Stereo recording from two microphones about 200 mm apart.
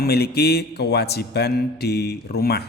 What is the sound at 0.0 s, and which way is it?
Speech, 55° left (ahead or behind).